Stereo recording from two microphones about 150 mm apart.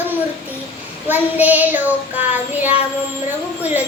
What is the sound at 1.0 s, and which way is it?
A child's voice, 10° right (ahead or behind).